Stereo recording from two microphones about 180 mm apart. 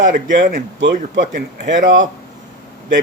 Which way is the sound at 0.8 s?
90° right.